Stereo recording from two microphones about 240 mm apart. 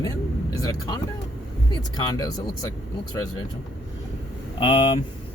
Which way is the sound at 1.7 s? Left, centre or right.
Centre.